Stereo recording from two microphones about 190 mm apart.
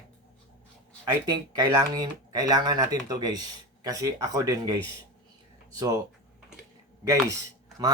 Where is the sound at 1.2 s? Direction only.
20° right (ahead or behind).